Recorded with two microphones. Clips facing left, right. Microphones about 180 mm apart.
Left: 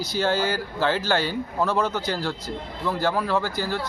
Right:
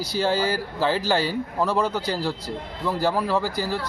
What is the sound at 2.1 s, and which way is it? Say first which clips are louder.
Speech: right 1 dB; 5° right (ahead or behind).